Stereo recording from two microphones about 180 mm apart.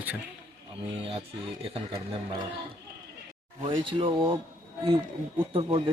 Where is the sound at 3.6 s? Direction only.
30° right (ahead or behind).